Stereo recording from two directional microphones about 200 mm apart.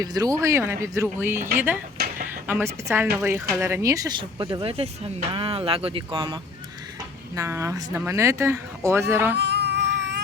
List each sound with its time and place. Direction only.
0.0 s speech: 20° right (ahead or behind)
7.3 s speech: 15° right (ahead or behind)
9.4 s a sound: 55° right (ahead or behind)